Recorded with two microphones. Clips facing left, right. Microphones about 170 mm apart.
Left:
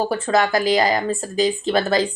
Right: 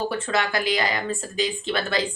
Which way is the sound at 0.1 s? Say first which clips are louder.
Left 6 dB; 40° left (ahead or behind).